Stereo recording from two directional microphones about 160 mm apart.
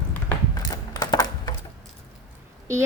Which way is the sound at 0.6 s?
25° left (ahead or behind).